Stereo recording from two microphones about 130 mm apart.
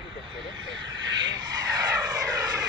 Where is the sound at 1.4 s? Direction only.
30° right (ahead or behind).